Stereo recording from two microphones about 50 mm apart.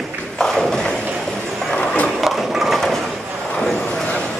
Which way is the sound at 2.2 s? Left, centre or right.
Centre.